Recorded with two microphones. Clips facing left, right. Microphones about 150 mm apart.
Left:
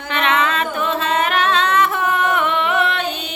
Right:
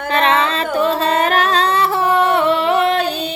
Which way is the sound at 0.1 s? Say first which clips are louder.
Right 3 dB; 35° right (ahead or behind).